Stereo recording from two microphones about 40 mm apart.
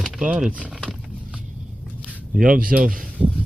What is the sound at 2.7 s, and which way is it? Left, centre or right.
Speech, right.